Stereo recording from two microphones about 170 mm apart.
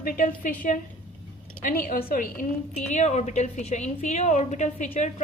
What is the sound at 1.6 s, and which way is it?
A woman's voice, 55° left (ahead or behind).